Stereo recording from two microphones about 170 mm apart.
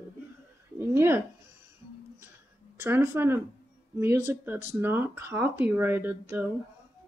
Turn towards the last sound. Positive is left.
turn(degrees=-10)  # may be behind; listen again after turning